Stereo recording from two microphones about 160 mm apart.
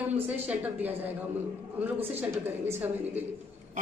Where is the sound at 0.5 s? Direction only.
10° right (ahead or behind).